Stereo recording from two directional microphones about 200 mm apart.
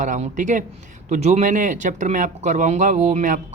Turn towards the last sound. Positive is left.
turn(degrees=-35)  # may be behind; listen again after turning